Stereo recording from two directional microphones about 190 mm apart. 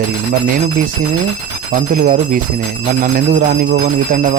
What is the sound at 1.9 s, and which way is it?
Speech, 45° right (ahead or behind).